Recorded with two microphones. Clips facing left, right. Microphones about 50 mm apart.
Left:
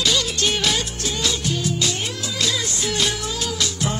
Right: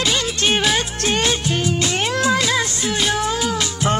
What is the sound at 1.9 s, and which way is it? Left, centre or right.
Music, right.